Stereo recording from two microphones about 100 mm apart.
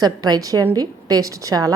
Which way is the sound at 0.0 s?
40° right (ahead or behind).